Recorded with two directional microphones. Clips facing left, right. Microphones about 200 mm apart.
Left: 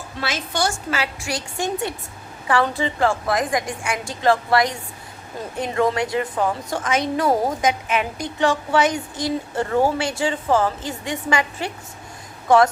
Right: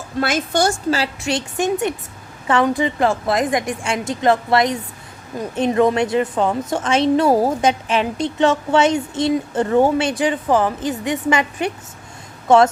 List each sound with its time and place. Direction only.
0.2 s a woman's voice: 50° right (ahead or behind)
0.9 s a woman's voice: 30° right (ahead or behind)